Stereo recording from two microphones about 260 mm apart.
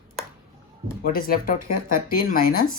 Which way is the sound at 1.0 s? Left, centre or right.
Left.